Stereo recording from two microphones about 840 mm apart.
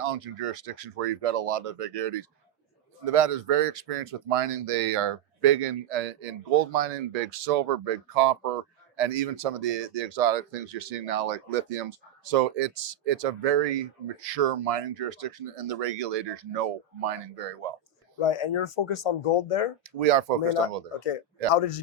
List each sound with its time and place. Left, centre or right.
0.0 s speech: right
18.2 s speech: left
19.8 s speech: right
21.5 s speech: left